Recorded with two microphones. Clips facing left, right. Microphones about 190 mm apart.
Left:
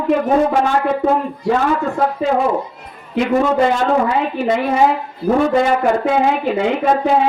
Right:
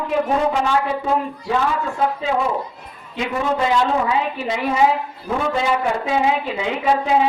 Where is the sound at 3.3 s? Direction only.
50° left (ahead or behind).